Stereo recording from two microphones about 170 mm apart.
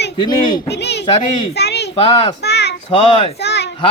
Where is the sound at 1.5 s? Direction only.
75° left (ahead or behind).